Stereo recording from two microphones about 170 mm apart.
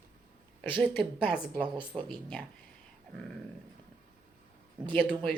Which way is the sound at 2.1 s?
5° left (ahead or behind).